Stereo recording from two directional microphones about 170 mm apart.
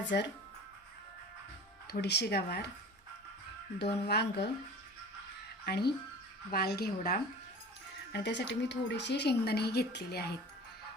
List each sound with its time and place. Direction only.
0.0 s speech: 90° left
1.9 s speech: 75° left (ahead or behind)
3.8 s speech: 75° left (ahead or behind)
5.6 s speech: 70° left (ahead or behind)
8.1 s speech: 90° left; by 10.3 s 70° left (ahead or behind)